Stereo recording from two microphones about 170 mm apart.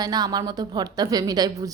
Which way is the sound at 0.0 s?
20° right (ahead or behind).